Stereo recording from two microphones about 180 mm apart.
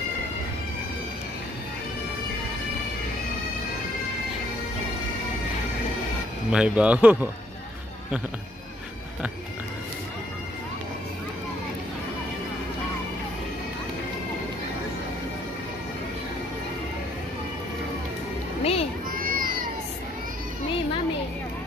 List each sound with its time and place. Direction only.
6.5 s speech: 5° right (ahead or behind)
18.6 s a sound: 35° left (ahead or behind)
19.1 s crowd: 50° right (ahead or behind)